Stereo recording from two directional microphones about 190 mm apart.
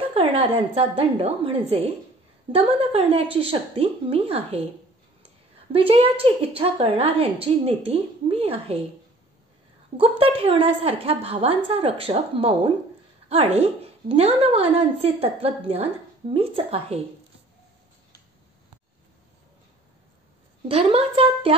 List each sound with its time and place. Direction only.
0.1 s a woman's voice: 30° right (ahead or behind)
5.7 s a woman's voice: 30° right (ahead or behind)
9.9 s a woman's voice: 30° right (ahead or behind)
20.6 s a woman's voice: 30° right (ahead or behind)